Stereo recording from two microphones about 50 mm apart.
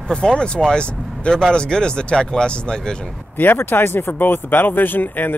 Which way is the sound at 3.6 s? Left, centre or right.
Left.